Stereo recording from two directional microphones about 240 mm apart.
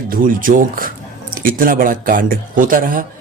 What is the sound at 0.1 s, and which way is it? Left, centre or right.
Speech, right.